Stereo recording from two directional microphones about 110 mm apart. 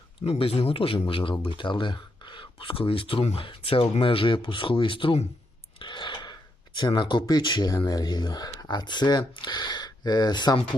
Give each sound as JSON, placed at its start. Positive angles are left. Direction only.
{"t": 0.3, "sound": "speech", "side_deg": 60}
{"t": 5.8, "sound": "a sound", "side_deg": 45}
{"t": 6.7, "sound": "speech", "side_deg": 45}